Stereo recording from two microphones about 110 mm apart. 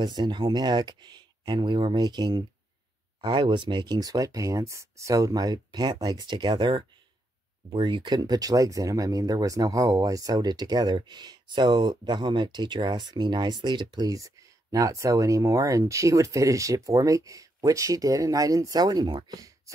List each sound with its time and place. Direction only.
0.0 s speech: 40° right (ahead or behind)